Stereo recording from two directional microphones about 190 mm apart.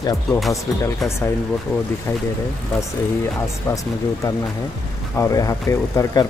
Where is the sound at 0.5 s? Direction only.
15° left (ahead or behind).